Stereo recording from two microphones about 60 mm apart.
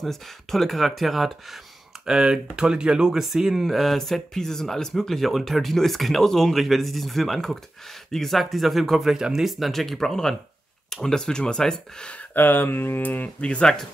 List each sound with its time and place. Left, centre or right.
0.0 s speech: centre
2.0 s speech: centre
12.4 s speech: left